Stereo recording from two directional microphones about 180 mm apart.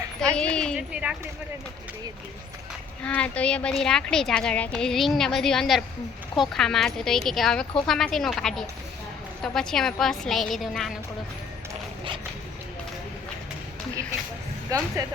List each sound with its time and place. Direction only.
0.3 s a woman's voice: 5° left (ahead or behind)
3.0 s a woman's voice: 5° left (ahead or behind)
14.7 s speech: 20° right (ahead or behind)